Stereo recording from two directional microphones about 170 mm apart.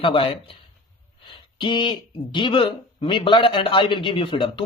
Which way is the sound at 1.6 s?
30° left (ahead or behind).